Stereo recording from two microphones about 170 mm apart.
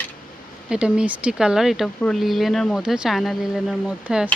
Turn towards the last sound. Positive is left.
turn(degrees=0)  # may be behind; listen again after turning